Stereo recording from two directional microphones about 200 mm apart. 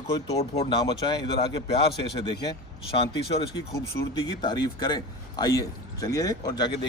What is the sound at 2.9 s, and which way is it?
Speech, 25° left (ahead or behind).